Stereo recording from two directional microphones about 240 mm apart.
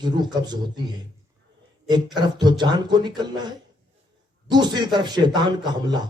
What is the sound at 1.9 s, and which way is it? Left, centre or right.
A man's voice, centre.